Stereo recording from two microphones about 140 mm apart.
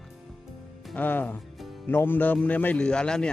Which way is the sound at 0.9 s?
10° left (ahead or behind).